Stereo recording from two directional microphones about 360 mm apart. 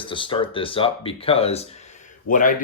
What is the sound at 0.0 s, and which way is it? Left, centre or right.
Speech, centre.